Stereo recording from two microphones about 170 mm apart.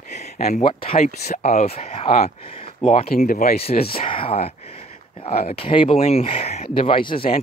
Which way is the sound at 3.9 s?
30° left (ahead or behind).